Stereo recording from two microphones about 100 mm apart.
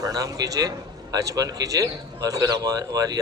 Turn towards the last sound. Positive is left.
turn(degrees=-40)  # may be behind; listen again after turning